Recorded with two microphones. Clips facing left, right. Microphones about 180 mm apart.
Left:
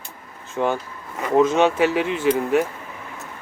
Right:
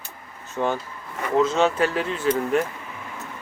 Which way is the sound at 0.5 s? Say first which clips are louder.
Left 2 dB; 10° left (ahead or behind).